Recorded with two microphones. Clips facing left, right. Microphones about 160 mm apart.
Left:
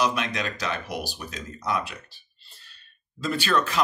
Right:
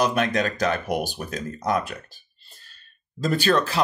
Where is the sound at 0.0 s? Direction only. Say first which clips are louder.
Right 4 dB; 50° right (ahead or behind).